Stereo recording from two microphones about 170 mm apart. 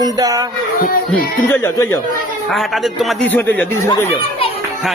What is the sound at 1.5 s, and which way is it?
Speech, 15° left (ahead or behind).